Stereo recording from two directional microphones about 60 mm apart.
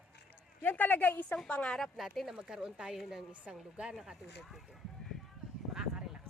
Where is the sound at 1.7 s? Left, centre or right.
Centre.